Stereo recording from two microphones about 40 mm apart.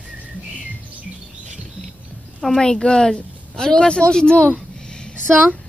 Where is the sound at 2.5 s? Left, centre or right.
Centre.